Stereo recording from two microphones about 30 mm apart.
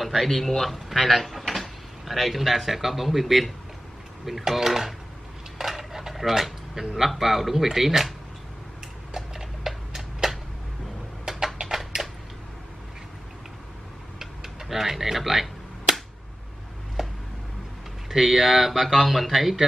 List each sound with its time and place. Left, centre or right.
0.0 s a sound: centre
0.3 s speech: centre
5.6 s dishes: centre
7.1 s speech: centre
9.1 s a sound: centre
11.6 s typewriter: centre
14.2 s cap gun: centre
17.0 s a sound: centre
18.1 s speech: centre